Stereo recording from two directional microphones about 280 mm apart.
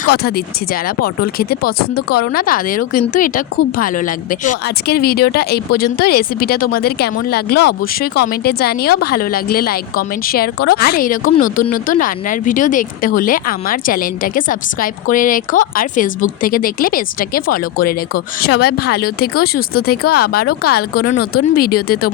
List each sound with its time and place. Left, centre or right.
0.2 s speech: left